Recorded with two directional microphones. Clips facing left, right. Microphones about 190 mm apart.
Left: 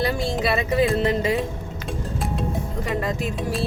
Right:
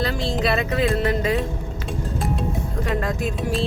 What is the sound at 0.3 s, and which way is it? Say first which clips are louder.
Speech: left 1 dB; 5° left (ahead or behind).